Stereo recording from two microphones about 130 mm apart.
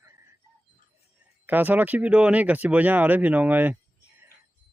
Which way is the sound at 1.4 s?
15° right (ahead or behind).